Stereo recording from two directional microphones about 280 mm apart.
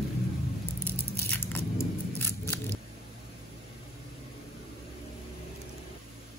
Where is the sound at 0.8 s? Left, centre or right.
Centre.